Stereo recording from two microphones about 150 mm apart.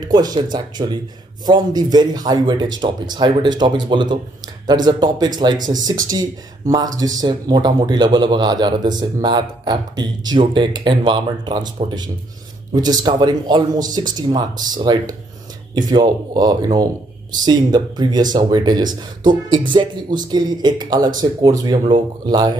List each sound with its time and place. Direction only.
0.1 s a man's voice: 25° right (ahead or behind)